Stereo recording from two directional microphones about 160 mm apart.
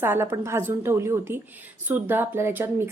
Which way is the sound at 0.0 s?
15° right (ahead or behind).